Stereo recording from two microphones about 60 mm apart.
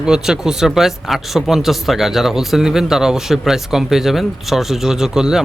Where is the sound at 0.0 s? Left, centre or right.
Centre.